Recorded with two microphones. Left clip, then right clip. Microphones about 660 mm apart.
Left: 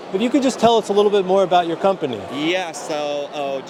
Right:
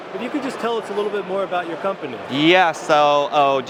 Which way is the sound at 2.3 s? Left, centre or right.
Right.